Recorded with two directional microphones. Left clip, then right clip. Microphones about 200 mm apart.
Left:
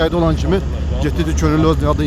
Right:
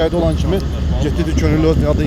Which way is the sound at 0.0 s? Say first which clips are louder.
Even; 25° left (ahead or behind).